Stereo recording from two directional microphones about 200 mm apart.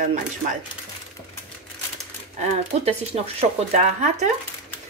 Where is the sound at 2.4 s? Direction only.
30° right (ahead or behind).